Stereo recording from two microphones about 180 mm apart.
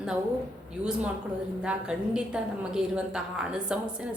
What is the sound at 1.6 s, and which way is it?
A woman's voice, 5° right (ahead or behind).